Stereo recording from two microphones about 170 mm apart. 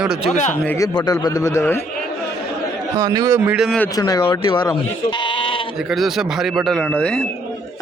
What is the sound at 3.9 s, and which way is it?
Speech, 25° left (ahead or behind).